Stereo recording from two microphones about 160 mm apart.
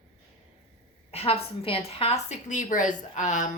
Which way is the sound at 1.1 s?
40° left (ahead or behind).